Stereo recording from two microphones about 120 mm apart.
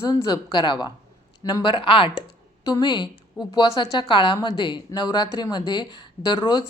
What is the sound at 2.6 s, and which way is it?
Speech, 35° left (ahead or behind).